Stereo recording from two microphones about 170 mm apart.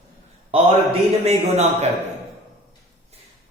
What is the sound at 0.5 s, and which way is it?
A man's voice, 35° right (ahead or behind).